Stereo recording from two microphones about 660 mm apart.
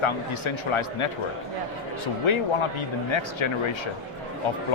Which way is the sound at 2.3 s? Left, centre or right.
Left.